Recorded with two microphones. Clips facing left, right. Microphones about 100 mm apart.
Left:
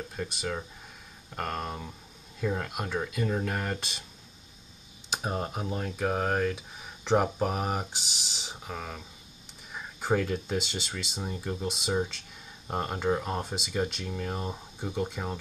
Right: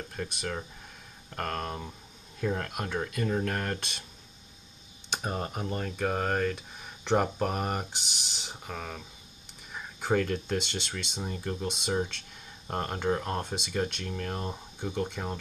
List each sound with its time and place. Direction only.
0.1 s speech: 5° left (ahead or behind)
5.1 s speech: 5° left (ahead or behind)